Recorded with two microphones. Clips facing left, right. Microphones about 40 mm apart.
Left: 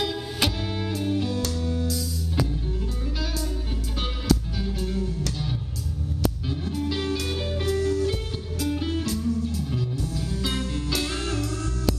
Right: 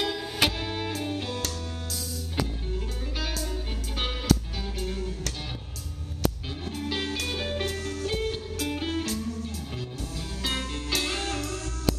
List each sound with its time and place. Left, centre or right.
0.0 s music: right
1.3 s music: right
4.7 s music: right
6.6 s music: right
10.4 s music: right